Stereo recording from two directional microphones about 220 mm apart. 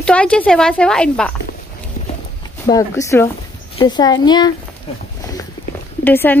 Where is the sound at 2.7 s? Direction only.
15° left (ahead or behind).